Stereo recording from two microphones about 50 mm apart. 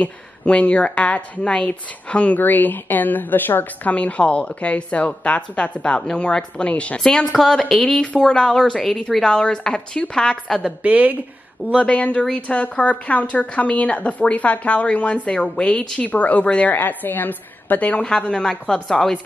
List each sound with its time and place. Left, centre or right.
0.0 s a woman's voice: left
2.3 s a woman's voice: left
3.9 s a woman's voice: left
7.0 s a woman's voice: centre
10.6 s a woman's voice: right
11.8 s a woman's voice: left
16.0 s a woman's voice: left
16.7 s a woman's voice: left; by 19.1 s centre